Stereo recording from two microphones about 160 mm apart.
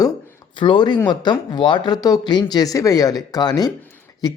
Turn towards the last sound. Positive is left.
turn(degrees=25)  # may be behind; listen again after turning